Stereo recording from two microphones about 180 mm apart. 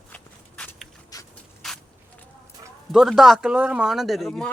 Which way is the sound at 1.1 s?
20° left (ahead or behind).